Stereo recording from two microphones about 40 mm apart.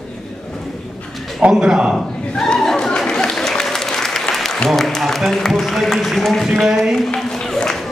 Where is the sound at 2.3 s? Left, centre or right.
Centre.